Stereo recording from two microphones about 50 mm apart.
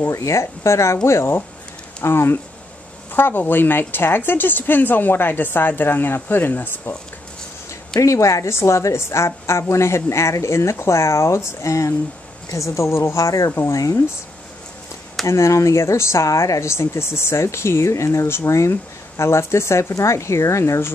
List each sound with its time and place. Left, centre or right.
0.1 s speech: left
2.0 s speech: left
3.1 s a woman's voice: left
8.0 s speech: left
15.2 s speech: left